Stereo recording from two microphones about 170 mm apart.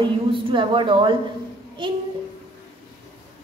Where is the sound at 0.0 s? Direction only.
30° right (ahead or behind).